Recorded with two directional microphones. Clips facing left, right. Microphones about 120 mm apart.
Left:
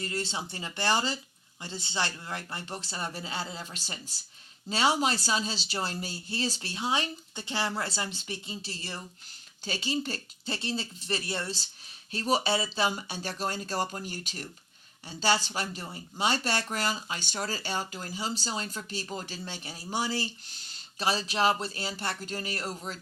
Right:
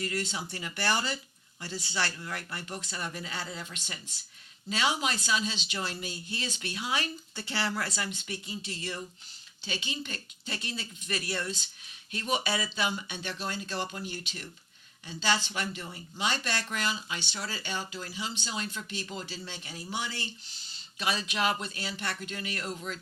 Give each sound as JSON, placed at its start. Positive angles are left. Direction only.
{"t": 0.0, "sound": "speech", "side_deg": 30}